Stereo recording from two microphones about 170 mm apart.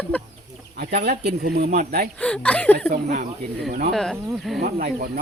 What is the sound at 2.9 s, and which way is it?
Speech, 50° right (ahead or behind).